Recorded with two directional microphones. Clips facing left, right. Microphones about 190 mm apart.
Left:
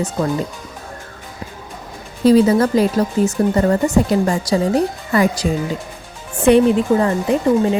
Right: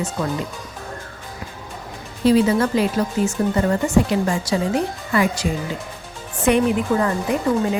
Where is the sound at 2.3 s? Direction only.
40° left (ahead or behind).